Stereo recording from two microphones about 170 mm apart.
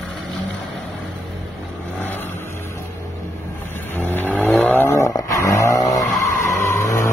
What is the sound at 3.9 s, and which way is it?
Vehicle, 10° left (ahead or behind).